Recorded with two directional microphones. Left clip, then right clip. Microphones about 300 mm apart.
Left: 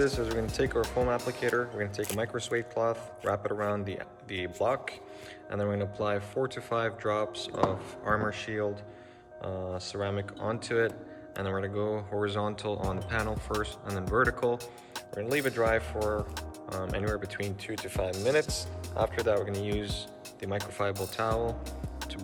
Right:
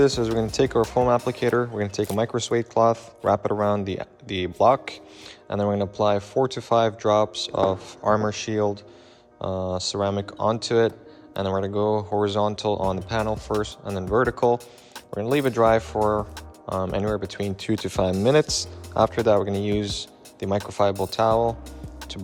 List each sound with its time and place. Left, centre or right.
0.3 s speech: centre